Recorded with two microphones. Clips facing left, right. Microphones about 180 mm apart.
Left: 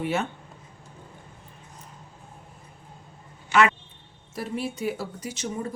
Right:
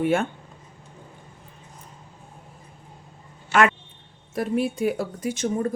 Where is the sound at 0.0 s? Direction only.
50° right (ahead or behind).